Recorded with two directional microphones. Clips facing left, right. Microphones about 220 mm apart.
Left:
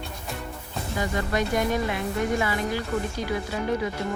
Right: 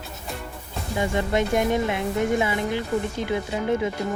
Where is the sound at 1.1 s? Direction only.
25° right (ahead or behind).